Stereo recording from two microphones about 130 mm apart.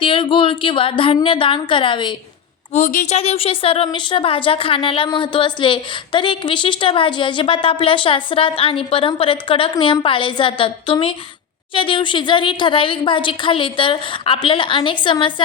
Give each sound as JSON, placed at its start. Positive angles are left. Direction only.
{"t": 0.0, "sound": "a woman's voice", "side_deg": 40}
{"t": 2.7, "sound": "speech", "side_deg": 80}
{"t": 3.2, "sound": "a woman's voice", "side_deg": 50}